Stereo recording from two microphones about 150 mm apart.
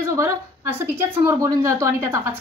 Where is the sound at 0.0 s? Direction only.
20° right (ahead or behind).